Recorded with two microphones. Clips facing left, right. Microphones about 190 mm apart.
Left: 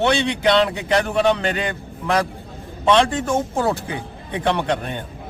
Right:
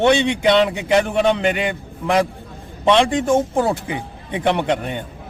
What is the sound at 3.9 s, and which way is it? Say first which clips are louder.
A man's voice: right 2 dB; 15° right (ahead or behind).